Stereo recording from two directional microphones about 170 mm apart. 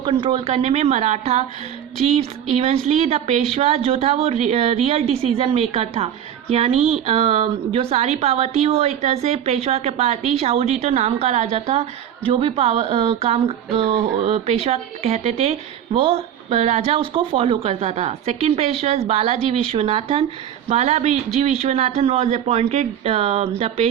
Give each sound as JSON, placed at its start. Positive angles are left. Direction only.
{"t": 0.0, "sound": "a woman's voice", "side_deg": -30}
{"t": 2.6, "sound": "a woman's voice", "side_deg": -40}